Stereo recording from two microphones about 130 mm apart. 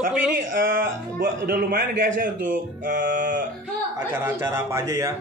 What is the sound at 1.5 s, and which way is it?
A man's voice, 90° right.